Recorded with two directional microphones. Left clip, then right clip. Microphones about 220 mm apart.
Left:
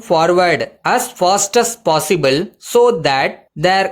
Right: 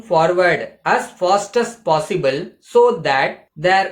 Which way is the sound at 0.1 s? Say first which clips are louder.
Left 2 dB; 50° left (ahead or behind).